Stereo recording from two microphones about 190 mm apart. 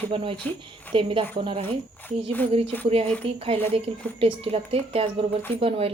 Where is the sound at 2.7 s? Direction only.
10° left (ahead or behind).